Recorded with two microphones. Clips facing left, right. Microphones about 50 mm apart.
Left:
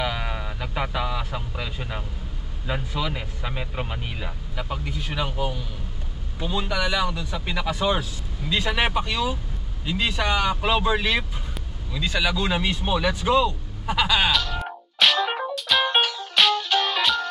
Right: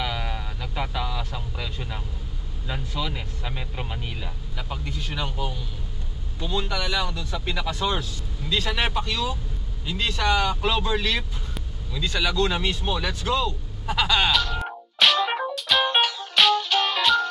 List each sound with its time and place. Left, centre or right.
0.0 s a sound: centre
2.6 s speech: centre
15.0 s music: centre